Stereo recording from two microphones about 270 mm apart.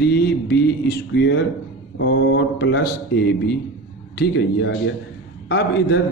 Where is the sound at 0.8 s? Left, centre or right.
Left.